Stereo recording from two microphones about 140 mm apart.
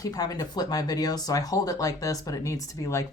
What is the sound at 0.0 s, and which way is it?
Speech, 25° left (ahead or behind).